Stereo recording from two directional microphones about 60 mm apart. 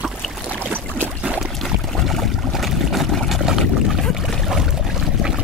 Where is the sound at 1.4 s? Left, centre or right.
Centre.